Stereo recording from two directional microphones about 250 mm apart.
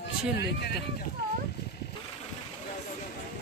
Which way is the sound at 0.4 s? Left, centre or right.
Left.